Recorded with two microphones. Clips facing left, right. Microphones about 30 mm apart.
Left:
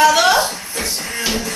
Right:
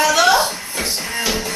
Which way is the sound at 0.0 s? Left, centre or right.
Centre.